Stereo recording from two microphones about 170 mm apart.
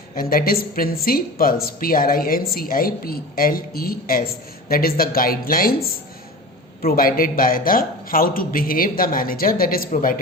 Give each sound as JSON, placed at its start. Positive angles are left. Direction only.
{"t": 0.2, "sound": "speech", "side_deg": 60}